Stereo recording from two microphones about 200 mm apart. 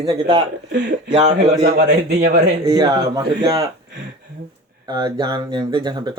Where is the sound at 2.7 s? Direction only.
20° right (ahead or behind).